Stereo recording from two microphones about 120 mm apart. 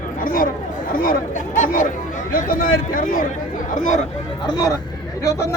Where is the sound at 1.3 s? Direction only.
90° left.